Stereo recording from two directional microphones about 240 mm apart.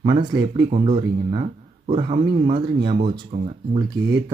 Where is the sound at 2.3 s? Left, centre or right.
Right.